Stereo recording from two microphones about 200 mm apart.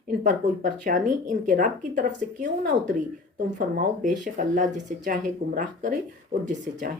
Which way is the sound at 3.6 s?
40° right (ahead or behind).